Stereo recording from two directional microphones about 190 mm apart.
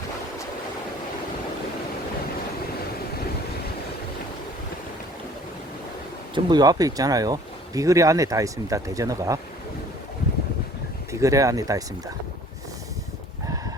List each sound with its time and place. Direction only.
6.3 s speech: 20° right (ahead or behind)
11.1 s speech: 15° right (ahead or behind)